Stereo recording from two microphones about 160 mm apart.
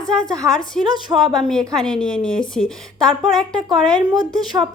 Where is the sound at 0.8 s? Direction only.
25° right (ahead or behind).